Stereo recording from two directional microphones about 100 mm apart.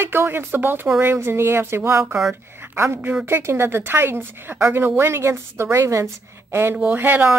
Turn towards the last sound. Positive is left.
turn(degrees=-20)  # may be behind; listen again after turning